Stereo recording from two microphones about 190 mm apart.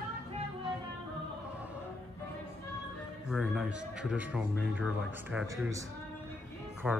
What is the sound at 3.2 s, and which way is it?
Speech, centre (ahead or behind).